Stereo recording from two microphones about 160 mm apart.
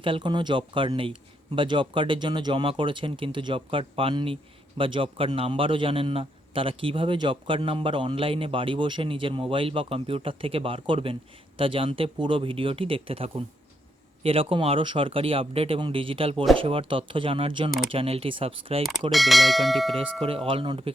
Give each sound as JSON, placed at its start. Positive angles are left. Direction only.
{"t": 0.0, "sound": "a man's voice", "side_deg": -30}
{"t": 18.8, "sound": "speech", "side_deg": 0}
{"t": 20.2, "sound": "a man's voice", "side_deg": -35}